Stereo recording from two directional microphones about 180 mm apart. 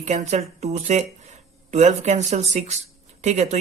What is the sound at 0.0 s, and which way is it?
Speech, 40° right (ahead or behind).